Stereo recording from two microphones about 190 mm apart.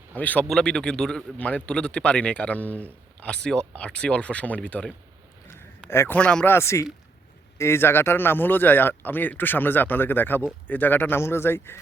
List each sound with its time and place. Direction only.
0.2 s a man's voice: 10° left (ahead or behind)